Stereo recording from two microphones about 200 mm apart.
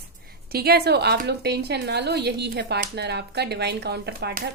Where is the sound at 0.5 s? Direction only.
50° right (ahead or behind).